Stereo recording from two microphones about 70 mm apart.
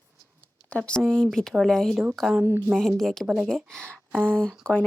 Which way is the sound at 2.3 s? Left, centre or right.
Right.